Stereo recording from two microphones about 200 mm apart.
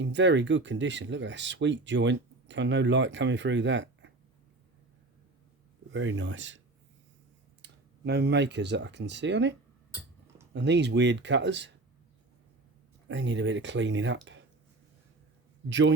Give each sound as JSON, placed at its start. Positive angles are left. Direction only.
{"t": 0.0, "sound": "speech", "side_deg": -65}
{"t": 5.9, "sound": "speech", "side_deg": -70}
{"t": 7.6, "sound": "speech", "side_deg": -55}
{"t": 13.1, "sound": "speech", "side_deg": -65}
{"t": 15.7, "sound": "speech", "side_deg": -65}